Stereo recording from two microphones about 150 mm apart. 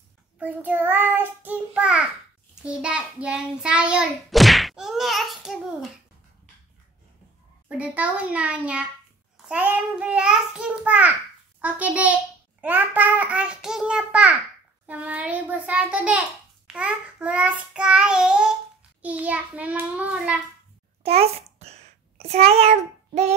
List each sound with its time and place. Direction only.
0.4 s a child's voice: 10° right (ahead or behind)
7.6 s a child's voice: 10° right (ahead or behind)
21.0 s a sound: 40° right (ahead or behind)